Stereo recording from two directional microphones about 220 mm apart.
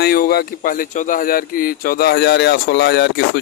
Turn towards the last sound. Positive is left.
turn(degrees=50)  # may be behind; listen again after turning